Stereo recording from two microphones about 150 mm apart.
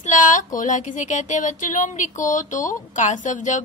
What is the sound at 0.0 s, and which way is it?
Speech, 60° left (ahead or behind).